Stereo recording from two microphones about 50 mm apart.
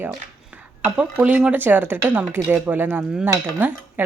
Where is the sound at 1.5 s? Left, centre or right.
Right.